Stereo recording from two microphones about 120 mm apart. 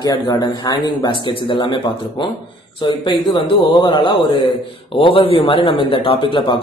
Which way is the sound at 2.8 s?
40° left (ahead or behind).